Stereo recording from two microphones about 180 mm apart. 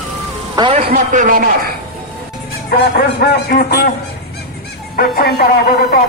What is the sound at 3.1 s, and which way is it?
Speech, 60° left (ahead or behind).